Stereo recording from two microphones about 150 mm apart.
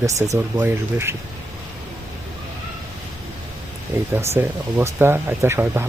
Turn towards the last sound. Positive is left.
turn(degrees=-15)  # may be behind; listen again after turning